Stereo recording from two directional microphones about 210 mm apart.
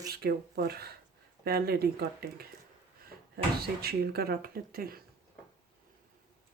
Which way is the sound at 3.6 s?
50° right (ahead or behind).